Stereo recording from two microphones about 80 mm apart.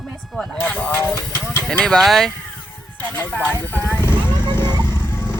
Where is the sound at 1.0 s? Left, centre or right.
Left.